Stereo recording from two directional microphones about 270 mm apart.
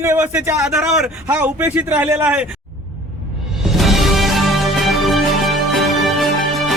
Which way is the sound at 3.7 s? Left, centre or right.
Centre.